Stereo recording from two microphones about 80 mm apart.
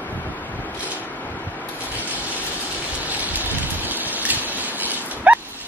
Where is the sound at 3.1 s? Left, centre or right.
Right.